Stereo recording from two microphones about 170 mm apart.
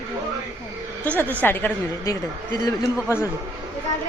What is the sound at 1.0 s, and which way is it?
A woman's voice, 10° left (ahead or behind).